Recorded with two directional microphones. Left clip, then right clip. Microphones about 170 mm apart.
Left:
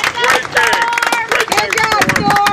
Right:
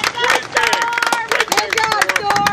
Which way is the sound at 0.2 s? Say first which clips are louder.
Left 3 dB; 45° left (ahead or behind).